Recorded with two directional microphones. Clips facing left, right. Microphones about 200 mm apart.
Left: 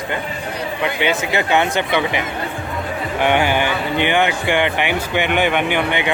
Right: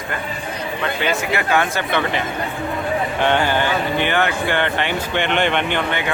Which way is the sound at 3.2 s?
15° left (ahead or behind).